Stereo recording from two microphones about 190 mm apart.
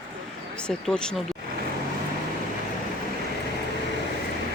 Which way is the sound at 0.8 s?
5° left (ahead or behind).